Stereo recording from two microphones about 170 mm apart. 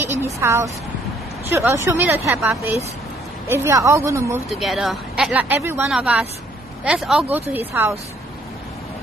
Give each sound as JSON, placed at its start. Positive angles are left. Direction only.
{"t": 0.0, "sound": "a woman's voice", "side_deg": -15}
{"t": 4.5, "sound": "speech", "side_deg": 0}
{"t": 5.9, "sound": "speech", "side_deg": -5}